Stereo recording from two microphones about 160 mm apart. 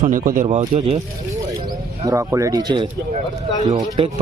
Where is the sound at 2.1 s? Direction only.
20° right (ahead or behind).